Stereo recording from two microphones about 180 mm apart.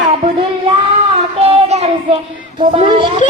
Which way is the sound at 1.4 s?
35° right (ahead or behind).